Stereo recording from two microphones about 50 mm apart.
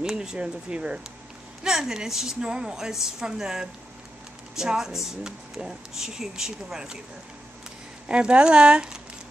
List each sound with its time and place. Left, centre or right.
0.1 s speech: centre
1.6 s speech: centre
8.1 s speech: centre